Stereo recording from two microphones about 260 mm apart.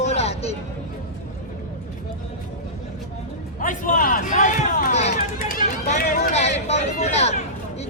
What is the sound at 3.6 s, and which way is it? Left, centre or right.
Speech, left.